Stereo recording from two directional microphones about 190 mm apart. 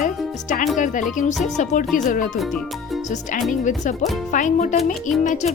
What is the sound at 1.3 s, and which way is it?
Music, centre (ahead or behind).